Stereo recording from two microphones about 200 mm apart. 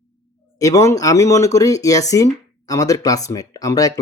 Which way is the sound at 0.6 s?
15° left (ahead or behind).